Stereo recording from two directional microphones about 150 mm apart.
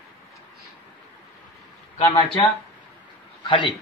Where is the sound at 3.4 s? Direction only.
30° left (ahead or behind).